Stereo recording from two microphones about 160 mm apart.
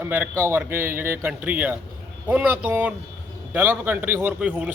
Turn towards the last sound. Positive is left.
turn(degrees=-10)  # may be behind; listen again after turning